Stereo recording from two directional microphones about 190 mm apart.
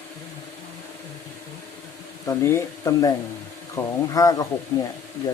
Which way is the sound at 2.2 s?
15° left (ahead or behind).